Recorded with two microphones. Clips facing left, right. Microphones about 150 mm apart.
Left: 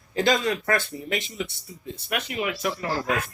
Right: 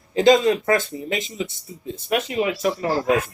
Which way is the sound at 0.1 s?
25° right (ahead or behind).